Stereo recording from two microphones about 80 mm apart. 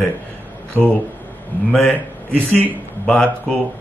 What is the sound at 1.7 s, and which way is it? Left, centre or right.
A man's voice, centre.